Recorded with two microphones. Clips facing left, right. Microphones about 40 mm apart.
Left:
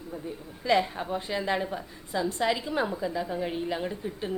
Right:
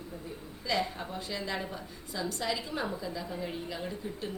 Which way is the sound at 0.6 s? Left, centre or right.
Left.